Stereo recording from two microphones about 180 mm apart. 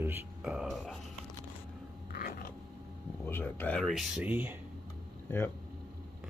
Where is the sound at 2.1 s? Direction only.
50° left (ahead or behind).